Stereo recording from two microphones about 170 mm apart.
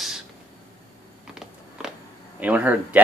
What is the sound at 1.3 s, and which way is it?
Biting, 5° right (ahead or behind).